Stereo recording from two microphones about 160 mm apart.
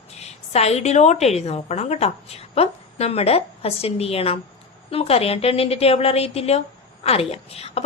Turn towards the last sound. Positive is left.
turn(degrees=40)  # may be behind; listen again after turning